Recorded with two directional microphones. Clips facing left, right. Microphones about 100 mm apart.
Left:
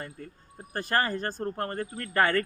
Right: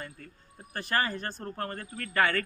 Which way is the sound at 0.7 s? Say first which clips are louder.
Left 3 dB; 40° left (ahead or behind).